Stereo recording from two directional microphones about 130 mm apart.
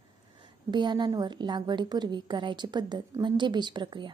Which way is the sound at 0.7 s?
35° right (ahead or behind).